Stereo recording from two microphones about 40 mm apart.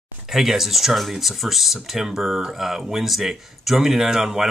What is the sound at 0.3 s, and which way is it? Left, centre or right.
Speech, centre.